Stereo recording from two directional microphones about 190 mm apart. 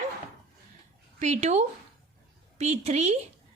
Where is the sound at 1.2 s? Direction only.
35° right (ahead or behind).